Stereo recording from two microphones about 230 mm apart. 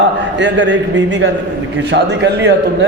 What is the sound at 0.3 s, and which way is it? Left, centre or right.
A man's voice, right.